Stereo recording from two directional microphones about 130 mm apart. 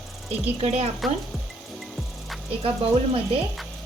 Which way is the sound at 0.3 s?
55° right (ahead or behind).